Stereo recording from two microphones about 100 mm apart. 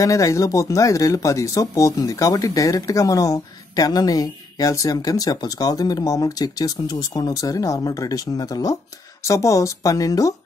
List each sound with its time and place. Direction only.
0.0 s speech: 30° left (ahead or behind)